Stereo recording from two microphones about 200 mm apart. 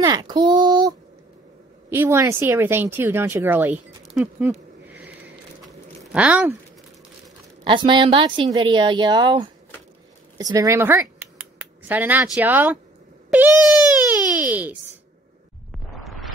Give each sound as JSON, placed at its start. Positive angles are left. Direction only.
{"t": 0.0, "sound": "child singing", "side_deg": -20}
{"t": 1.9, "sound": "a woman's voice", "side_deg": -10}
{"t": 7.6, "sound": "a woman's voice", "side_deg": -25}
{"t": 13.3, "sound": "cat", "side_deg": -5}
{"t": 14.3, "sound": "a sound", "side_deg": -10}